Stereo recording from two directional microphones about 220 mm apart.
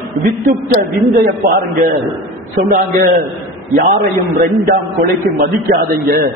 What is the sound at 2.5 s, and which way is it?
A man's voice, 35° right (ahead or behind).